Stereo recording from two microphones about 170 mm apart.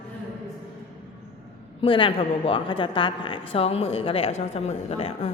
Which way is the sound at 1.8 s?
30° left (ahead or behind).